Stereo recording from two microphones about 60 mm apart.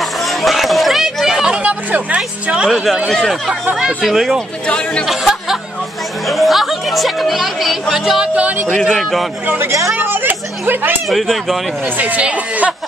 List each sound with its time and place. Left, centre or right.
0.2 s a sound: centre
1.5 s speech: right
3.1 s speech: centre
4.0 s speech: centre
4.6 s speech: centre
5.0 s speech: centre
7.9 s music: centre
8.4 s speech: right
8.9 s speech: centre
9.9 s speech: right
11.1 s speech: centre
12.0 s speech: right